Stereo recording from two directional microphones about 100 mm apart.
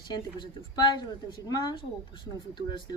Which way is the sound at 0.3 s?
50° left (ahead or behind).